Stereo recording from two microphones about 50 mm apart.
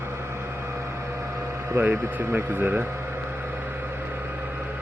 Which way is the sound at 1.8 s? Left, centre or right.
Right.